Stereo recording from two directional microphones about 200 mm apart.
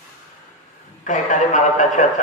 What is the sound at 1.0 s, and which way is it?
A man's voice, 40° left (ahead or behind).